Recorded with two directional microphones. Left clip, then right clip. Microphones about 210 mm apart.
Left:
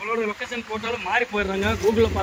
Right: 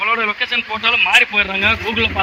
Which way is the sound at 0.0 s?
10° left (ahead or behind).